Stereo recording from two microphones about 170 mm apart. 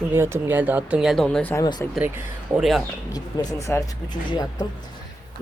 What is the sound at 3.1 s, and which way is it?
Speech, 20° left (ahead or behind).